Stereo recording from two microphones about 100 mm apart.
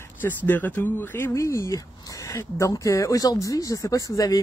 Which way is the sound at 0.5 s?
20° left (ahead or behind).